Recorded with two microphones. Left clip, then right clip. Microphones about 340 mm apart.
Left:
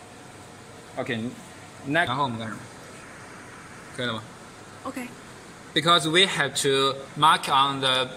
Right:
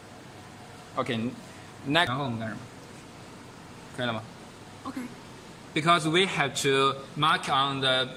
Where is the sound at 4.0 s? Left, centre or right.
Centre.